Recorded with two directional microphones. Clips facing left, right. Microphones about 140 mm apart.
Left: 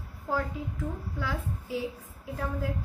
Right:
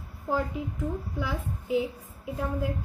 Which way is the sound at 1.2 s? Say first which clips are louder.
Right 2 dB; 15° right (ahead or behind).